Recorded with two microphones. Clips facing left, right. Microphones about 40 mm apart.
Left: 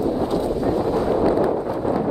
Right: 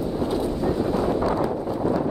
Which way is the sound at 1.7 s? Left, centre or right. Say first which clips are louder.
Left 1 dB; centre.